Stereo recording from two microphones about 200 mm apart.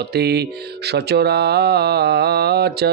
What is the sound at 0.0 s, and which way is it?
Speech, 55° right (ahead or behind).